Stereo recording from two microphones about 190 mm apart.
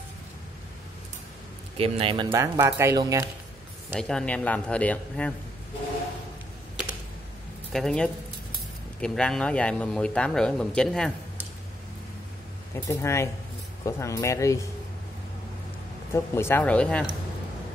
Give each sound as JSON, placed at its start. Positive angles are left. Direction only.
{"t": 1.8, "sound": "speech", "side_deg": -30}
{"t": 2.3, "sound": "speech", "side_deg": -15}
{"t": 3.9, "sound": "speech", "side_deg": 5}
{"t": 7.7, "sound": "speech", "side_deg": 5}
{"t": 12.8, "sound": "speech", "side_deg": 15}
{"t": 16.1, "sound": "speech", "side_deg": 15}